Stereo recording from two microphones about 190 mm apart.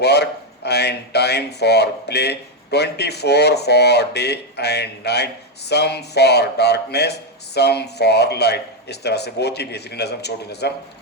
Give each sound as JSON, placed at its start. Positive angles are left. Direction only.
{"t": 0.0, "sound": "speech", "side_deg": 60}